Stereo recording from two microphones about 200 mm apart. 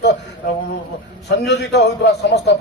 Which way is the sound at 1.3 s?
60° left (ahead or behind).